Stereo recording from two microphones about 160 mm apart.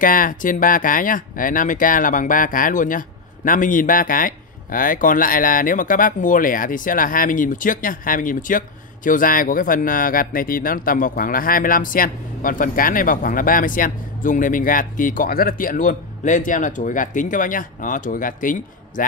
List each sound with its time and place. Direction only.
0.0 s speech: 60° left (ahead or behind)